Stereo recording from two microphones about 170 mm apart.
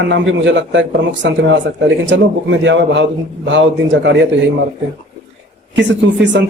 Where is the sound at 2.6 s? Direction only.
90° right.